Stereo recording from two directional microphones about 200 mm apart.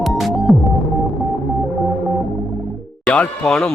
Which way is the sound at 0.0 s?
Centre (ahead or behind).